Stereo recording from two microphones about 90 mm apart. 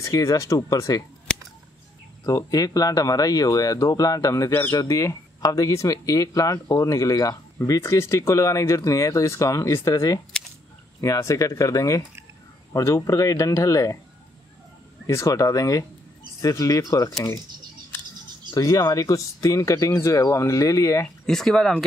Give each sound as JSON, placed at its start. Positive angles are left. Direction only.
{"t": 0.0, "sound": "speech", "side_deg": 35}
{"t": 2.2, "sound": "speech", "side_deg": 40}
{"t": 4.5, "sound": "speech", "side_deg": 25}
{"t": 4.7, "sound": "speech", "side_deg": 40}
{"t": 15.0, "sound": "speech", "side_deg": 35}
{"t": 18.5, "sound": "speech", "side_deg": 45}
{"t": 21.3, "sound": "speech", "side_deg": 5}